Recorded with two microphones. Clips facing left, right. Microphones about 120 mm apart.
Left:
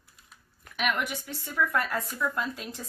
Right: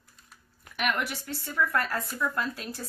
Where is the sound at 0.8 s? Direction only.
10° left (ahead or behind).